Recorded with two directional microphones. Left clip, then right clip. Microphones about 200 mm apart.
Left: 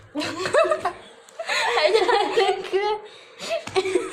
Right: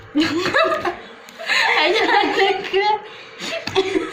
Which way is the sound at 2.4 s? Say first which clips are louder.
Right 4 dB; 40° left (ahead or behind).